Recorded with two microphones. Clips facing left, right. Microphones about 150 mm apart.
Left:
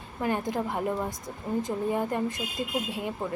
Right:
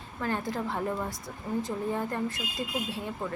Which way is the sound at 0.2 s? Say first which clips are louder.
Left 3 dB; 15° left (ahead or behind).